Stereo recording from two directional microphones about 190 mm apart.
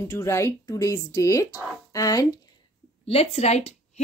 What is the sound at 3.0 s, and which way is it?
Speech, 35° left (ahead or behind).